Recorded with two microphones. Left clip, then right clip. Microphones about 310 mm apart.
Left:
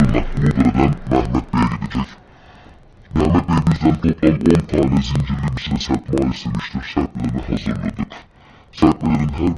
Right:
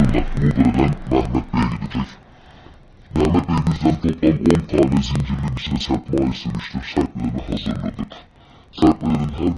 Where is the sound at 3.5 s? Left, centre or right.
Centre.